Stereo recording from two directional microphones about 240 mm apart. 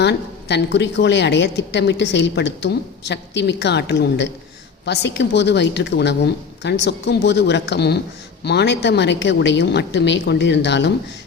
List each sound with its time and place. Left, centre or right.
0.0 s a woman's voice: left